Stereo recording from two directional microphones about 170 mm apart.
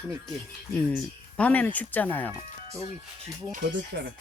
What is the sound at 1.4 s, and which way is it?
Speech, 10° left (ahead or behind).